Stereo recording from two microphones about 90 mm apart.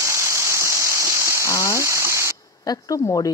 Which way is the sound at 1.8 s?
30° right (ahead or behind).